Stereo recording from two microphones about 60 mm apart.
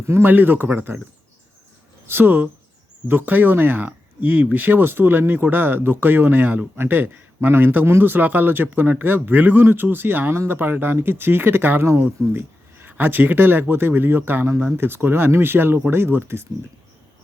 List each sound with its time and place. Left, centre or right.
0.1 s speech: right
2.0 s speech: right
12.2 s a sound: right
12.9 s speech: right